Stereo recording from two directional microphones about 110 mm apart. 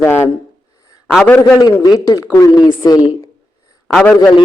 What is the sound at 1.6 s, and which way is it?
A woman's voice, 35° left (ahead or behind).